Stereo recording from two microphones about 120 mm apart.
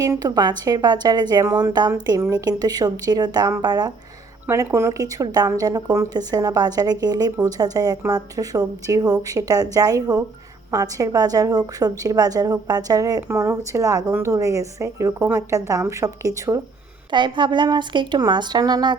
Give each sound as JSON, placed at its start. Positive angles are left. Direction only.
{"t": 0.0, "sound": "a woman's voice", "side_deg": -30}
{"t": 17.1, "sound": "speech", "side_deg": -40}